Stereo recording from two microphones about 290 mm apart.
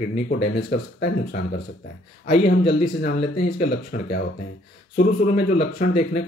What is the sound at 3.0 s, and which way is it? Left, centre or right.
Speech, left.